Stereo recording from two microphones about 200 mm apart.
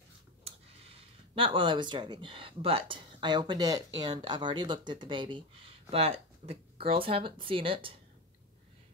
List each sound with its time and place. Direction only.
1.3 s speech: 25° right (ahead or behind)